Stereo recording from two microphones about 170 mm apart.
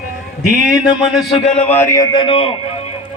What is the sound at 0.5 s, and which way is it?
Speech, 5° right (ahead or behind).